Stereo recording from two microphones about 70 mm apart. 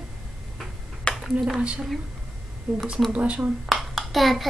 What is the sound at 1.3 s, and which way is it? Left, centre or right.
A woman's voice, centre.